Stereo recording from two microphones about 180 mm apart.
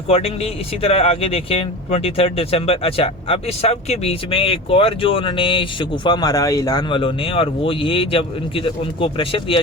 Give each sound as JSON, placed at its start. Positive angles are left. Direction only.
{"t": 0.1, "sound": "speech", "side_deg": 35}